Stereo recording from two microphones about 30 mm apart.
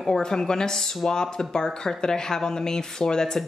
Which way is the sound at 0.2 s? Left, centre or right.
Left.